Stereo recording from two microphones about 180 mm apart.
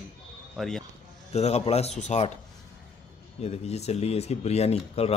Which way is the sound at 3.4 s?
35° left (ahead or behind).